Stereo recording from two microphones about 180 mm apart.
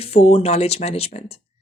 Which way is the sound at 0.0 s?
35° left (ahead or behind).